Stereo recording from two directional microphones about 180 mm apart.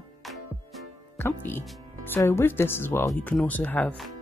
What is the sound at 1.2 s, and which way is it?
Speech, 10° left (ahead or behind).